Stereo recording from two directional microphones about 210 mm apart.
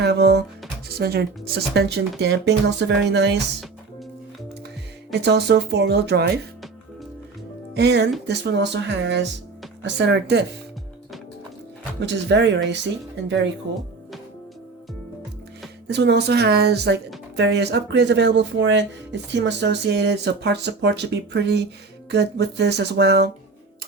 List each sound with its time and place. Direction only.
0.0 s music: 55° right (ahead or behind)
1.7 s speech: 50° right (ahead or behind)
5.2 s speech: 55° right (ahead or behind)
7.7 s speech: 50° right (ahead or behind)
11.9 s speech: 55° right (ahead or behind)
15.9 s speech: 55° right (ahead or behind)